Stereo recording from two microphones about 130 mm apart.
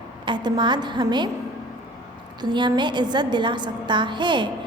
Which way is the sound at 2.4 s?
35° right (ahead or behind).